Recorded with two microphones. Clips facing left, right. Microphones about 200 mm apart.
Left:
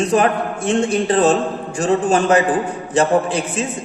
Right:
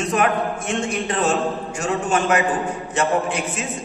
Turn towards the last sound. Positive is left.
turn(degrees=35)  # may be behind; listen again after turning